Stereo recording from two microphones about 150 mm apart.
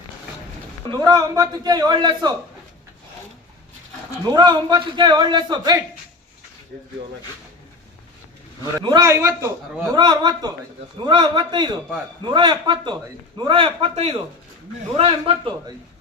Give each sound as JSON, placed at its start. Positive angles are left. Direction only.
{"t": 0.9, "sound": "a man's voice", "side_deg": -25}
{"t": 4.3, "sound": "a man's voice", "side_deg": -30}
{"t": 8.8, "sound": "a man's voice", "side_deg": -30}